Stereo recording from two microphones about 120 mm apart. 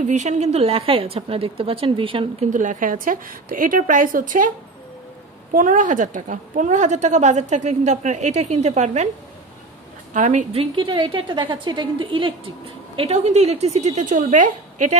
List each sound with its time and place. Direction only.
0.0 s a woman's voice: 75° right (ahead or behind); by 2.5 s 45° right (ahead or behind)
2.5 s a woman's voice: 90° right
5.6 s a woman's voice: 90° right; by 9.1 s 75° right (ahead or behind)
10.1 s a woman's voice: 85° right
10.5 s a woman's voice: 50° right (ahead or behind)
12.9 s a woman's voice: 60° right (ahead or behind); by 15.0 s 90° right